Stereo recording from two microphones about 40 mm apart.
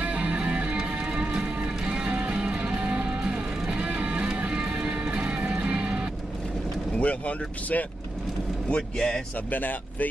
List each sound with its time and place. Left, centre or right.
0.0 s music: right
7.0 s speech: left
8.6 s speech: left
9.5 s speech: left